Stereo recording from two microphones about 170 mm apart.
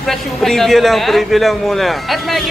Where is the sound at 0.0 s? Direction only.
Centre (ahead or behind).